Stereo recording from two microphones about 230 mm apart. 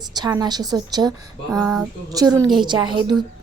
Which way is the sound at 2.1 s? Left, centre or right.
Centre.